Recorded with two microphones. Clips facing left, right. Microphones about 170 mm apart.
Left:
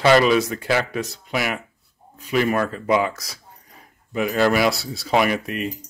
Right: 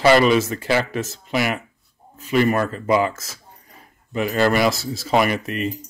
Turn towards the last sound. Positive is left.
turn(degrees=0)  # may be behind; listen again after turning